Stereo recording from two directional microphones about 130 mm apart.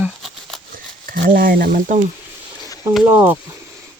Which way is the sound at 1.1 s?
90° right.